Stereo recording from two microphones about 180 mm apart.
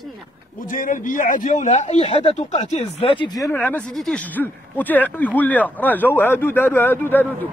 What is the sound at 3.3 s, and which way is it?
A man's voice, 15° left (ahead or behind).